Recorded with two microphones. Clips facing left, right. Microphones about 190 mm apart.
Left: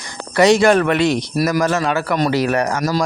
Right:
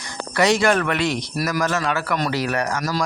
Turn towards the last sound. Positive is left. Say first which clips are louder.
# left 5 dB
turn(degrees=20)  # may be behind; listen again after turning